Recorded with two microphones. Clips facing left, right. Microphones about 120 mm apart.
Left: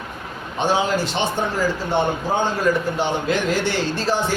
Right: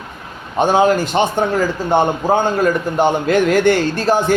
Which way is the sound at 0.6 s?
50° right (ahead or behind).